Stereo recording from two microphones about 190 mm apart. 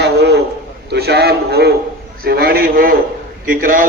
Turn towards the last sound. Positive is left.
turn(degrees=-45)  # may be behind; listen again after turning